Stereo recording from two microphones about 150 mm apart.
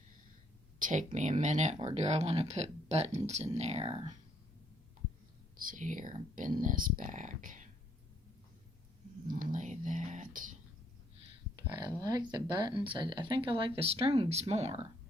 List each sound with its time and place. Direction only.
0.8 s speech: 55° right (ahead or behind)
1.8 s speech: 40° right (ahead or behind)
5.5 s speech: 65° right (ahead or behind)
9.2 s whispering: 60° right (ahead or behind)
11.5 s speech: 25° right (ahead or behind); by 14.8 s 45° right (ahead or behind)